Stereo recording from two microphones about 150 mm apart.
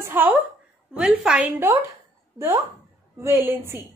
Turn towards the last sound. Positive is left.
turn(degrees=-15)  # may be behind; listen again after turning